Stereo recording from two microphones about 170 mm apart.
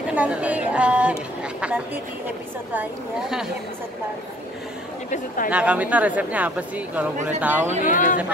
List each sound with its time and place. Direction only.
0.1 s a sound: 5° right (ahead or behind)
1.4 s speech: 5° right (ahead or behind)
5.5 s speech: 10° right (ahead or behind)
7.8 s speech: 50° left (ahead or behind)